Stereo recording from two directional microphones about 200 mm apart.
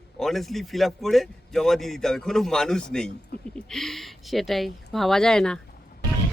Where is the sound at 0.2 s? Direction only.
Centre (ahead or behind).